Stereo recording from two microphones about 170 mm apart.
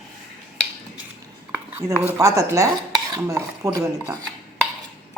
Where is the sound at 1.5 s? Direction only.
15° right (ahead or behind).